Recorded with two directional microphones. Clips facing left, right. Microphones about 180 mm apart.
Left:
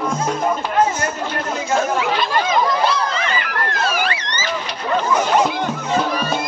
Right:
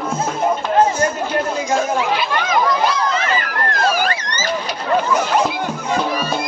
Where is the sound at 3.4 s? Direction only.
45° right (ahead or behind).